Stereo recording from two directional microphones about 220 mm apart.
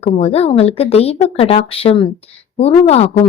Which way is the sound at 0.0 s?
25° left (ahead or behind).